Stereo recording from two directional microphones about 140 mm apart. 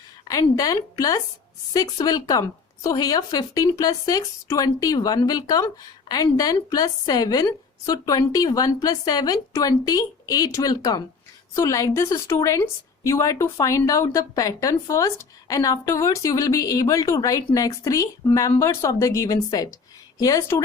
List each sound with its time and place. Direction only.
0.3 s a woman's voice: 25° left (ahead or behind)